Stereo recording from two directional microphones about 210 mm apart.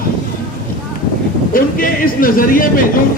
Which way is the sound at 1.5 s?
45° left (ahead or behind).